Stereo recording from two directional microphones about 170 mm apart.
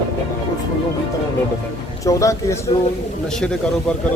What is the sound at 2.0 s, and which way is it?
Speech, 20° left (ahead or behind).